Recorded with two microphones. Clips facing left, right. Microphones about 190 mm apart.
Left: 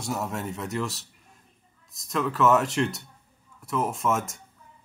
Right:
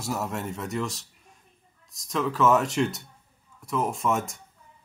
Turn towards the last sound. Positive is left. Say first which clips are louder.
# even
turn(degrees=0)  # may be behind; listen again after turning